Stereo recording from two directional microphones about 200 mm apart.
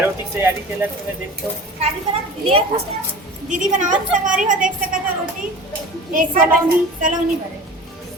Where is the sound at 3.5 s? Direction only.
40° right (ahead or behind).